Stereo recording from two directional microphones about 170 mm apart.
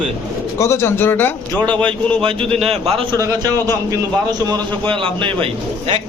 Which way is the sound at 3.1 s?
20° right (ahead or behind).